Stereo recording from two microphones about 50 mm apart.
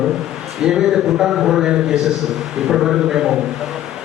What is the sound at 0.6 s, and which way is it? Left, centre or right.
A man's voice, centre.